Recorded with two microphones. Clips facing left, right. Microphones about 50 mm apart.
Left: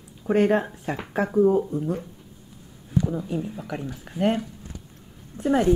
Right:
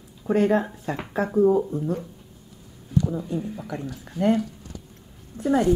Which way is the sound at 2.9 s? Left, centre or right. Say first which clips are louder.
Right 1 dB; centre.